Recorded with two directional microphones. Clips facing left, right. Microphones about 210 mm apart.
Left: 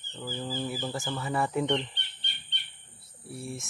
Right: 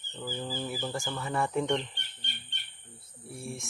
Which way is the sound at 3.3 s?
Centre (ahead or behind).